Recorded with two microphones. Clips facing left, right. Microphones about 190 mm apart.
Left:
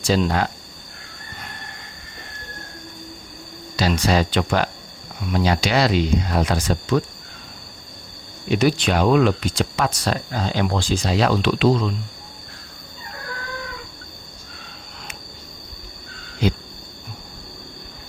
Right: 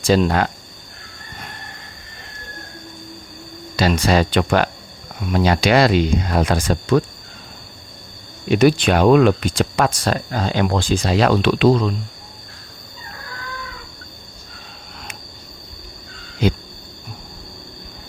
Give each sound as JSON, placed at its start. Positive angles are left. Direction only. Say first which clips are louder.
{"t": 0.0, "sound": "speech", "louder": "right 4 dB", "side_deg": -55}
{"t": 3.8, "sound": "speech", "louder": "right 3 dB", "side_deg": -55}
{"t": 8.4, "sound": "speech", "louder": "right 5 dB", "side_deg": -55}